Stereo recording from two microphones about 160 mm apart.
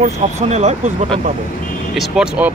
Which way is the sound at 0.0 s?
45° right (ahead or behind).